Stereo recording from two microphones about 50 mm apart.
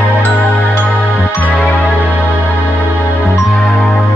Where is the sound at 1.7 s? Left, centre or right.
Left.